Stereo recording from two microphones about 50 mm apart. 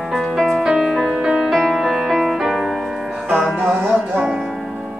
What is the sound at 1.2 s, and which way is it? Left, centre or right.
Music, centre.